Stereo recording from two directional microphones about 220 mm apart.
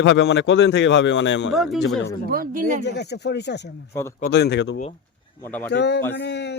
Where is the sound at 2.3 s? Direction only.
40° right (ahead or behind).